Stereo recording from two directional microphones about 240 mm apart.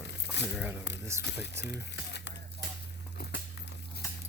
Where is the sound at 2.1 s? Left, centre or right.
Left.